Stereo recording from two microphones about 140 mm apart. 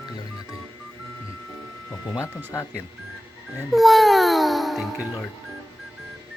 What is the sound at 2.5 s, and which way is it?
Speech, 20° left (ahead or behind).